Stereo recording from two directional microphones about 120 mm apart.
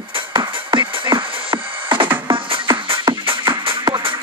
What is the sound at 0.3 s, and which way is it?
Music, 40° right (ahead or behind).